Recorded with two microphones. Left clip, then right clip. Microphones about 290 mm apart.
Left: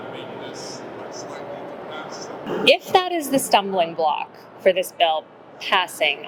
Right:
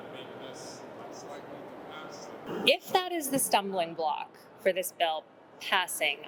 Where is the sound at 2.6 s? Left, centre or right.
Right.